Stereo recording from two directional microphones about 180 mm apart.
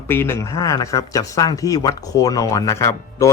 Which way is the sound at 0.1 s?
10° left (ahead or behind).